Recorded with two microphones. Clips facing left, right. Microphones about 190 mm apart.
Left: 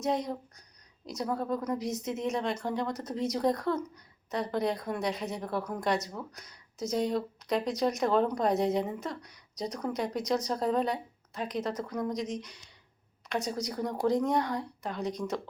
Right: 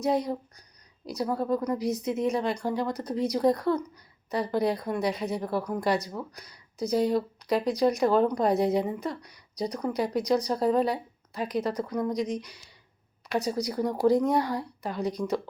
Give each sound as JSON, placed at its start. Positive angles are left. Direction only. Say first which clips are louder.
{"t": 0.0, "sound": "a woman's voice", "louder": "right 4 dB", "side_deg": 0}